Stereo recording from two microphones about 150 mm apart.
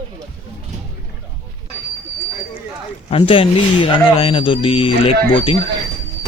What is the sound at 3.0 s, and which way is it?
Speech, 40° left (ahead or behind).